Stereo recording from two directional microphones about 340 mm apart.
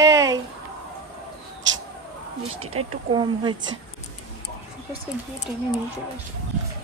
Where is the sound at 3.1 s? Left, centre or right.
Centre.